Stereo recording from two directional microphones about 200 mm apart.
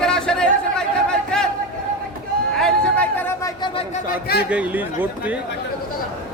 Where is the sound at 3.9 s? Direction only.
45° left (ahead or behind).